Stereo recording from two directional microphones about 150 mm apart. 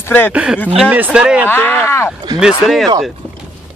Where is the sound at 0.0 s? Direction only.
15° left (ahead or behind).